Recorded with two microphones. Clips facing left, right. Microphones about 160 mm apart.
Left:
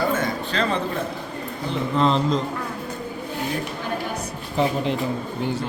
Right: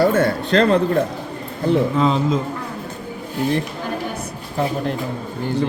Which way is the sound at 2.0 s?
5° right (ahead or behind).